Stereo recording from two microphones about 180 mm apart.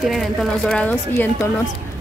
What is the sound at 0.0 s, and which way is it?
Speech, centre (ahead or behind).